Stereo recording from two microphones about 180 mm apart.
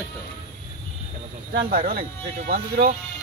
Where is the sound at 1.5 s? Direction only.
55° right (ahead or behind).